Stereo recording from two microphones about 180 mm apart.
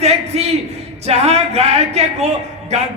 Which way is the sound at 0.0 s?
35° right (ahead or behind).